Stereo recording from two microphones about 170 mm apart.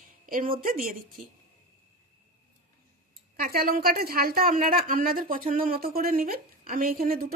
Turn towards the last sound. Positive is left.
turn(degrees=-60)  # may be behind; listen again after turning